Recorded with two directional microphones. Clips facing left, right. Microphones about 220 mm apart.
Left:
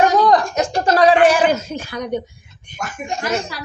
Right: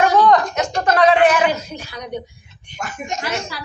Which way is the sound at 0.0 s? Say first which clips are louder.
Even; 35° left (ahead or behind).